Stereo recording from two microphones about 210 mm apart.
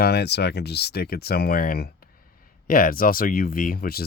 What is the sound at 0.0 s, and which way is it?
Speech, 50° left (ahead or behind).